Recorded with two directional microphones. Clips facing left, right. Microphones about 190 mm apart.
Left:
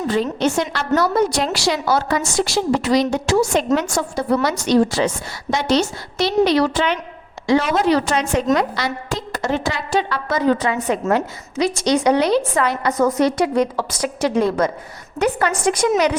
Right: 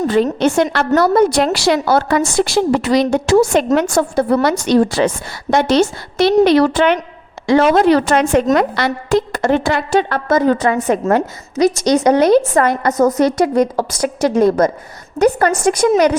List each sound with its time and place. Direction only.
0.1 s a woman's voice: 60° right (ahead or behind); by 15.9 s 45° right (ahead or behind)